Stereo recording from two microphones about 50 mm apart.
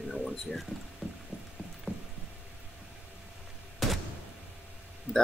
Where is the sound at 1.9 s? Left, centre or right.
Centre.